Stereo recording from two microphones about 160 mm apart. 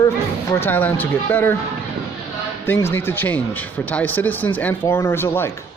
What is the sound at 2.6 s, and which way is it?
Speech, 15° left (ahead or behind).